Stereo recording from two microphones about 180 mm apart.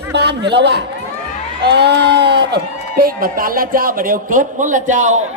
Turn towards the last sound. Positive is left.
turn(degrees=-45)  # may be behind; listen again after turning